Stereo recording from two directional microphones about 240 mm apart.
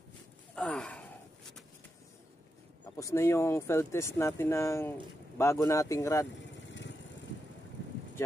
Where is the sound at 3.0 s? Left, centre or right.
Centre.